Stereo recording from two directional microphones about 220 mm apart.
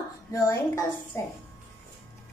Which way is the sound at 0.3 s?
15° left (ahead or behind).